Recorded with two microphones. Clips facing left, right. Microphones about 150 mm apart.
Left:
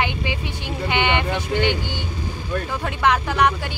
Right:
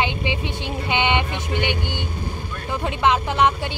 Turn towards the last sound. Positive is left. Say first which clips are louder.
# even
turn(degrees=-20)  # may be behind; listen again after turning